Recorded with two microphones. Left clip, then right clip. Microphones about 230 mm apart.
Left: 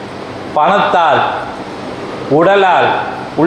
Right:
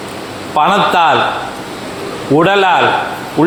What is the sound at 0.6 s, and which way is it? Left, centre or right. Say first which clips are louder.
Speech: even; right.